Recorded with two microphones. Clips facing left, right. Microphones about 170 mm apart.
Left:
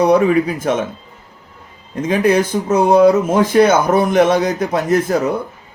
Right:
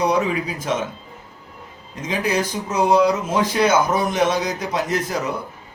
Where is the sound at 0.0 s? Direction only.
55° left (ahead or behind).